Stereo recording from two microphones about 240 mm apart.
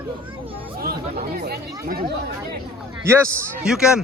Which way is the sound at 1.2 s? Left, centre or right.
Right.